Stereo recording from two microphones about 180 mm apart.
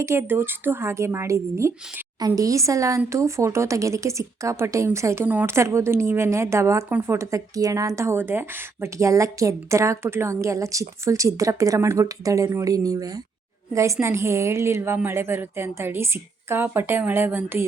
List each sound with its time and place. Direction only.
0.0 s speech: 15° right (ahead or behind)